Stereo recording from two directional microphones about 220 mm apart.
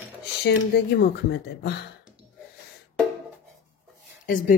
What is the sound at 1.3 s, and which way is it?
Speech, 50° left (ahead or behind).